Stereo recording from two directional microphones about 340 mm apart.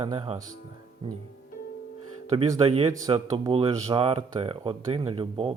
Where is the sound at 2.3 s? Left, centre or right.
Centre.